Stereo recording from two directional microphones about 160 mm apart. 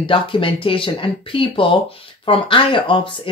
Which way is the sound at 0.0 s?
35° left (ahead or behind).